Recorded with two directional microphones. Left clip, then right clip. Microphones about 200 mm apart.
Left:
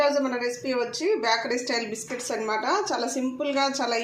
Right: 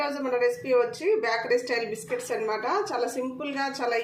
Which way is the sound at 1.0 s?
25° left (ahead or behind).